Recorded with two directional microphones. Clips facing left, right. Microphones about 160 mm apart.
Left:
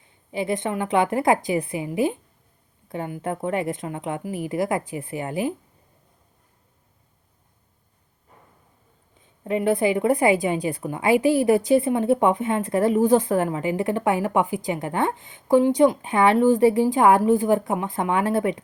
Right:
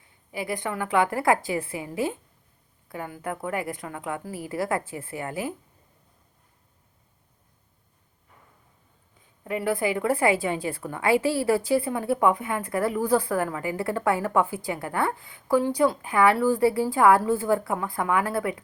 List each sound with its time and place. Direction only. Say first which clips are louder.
0.0 s a woman's voice: left 6 dB; 20° left (ahead or behind)
9.2 s a woman's voice: left 5 dB; 20° left (ahead or behind)